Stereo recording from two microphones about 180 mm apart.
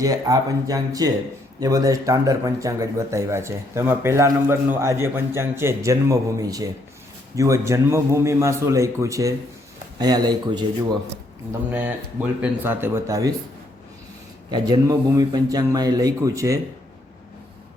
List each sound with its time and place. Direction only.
0.0 s speech: 20° right (ahead or behind)
11.7 s speech: 10° right (ahead or behind)
14.5 s speech: 20° right (ahead or behind)